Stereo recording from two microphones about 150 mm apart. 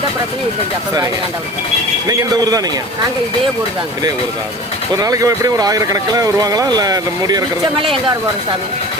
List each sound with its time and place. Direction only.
2.0 s speech: 25° right (ahead or behind)
4.9 s speech: 25° right (ahead or behind)